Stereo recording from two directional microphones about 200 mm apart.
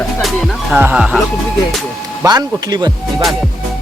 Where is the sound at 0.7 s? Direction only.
10° right (ahead or behind).